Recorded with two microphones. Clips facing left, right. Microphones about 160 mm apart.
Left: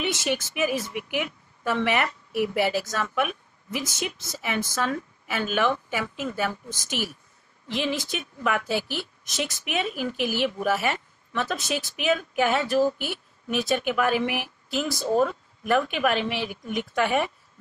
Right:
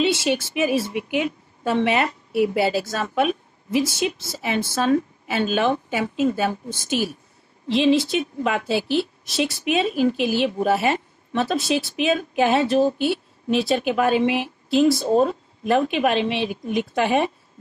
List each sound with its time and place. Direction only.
0.0 s speech: 25° right (ahead or behind)